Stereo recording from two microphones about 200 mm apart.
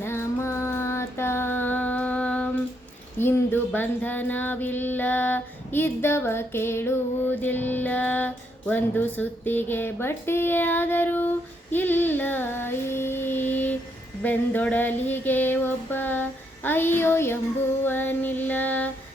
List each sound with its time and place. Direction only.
0.0 s child singing: 10° left (ahead or behind)
3.2 s female singing: 10° left (ahead or behind)